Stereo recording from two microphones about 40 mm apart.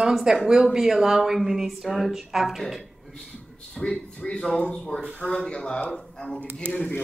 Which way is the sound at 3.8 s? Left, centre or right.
Left.